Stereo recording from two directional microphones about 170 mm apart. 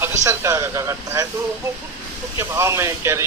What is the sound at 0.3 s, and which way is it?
Music, 15° right (ahead or behind).